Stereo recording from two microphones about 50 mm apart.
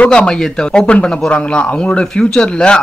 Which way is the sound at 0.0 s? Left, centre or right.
Left.